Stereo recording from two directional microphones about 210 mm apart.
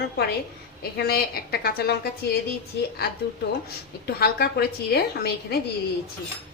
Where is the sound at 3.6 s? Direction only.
50° left (ahead or behind).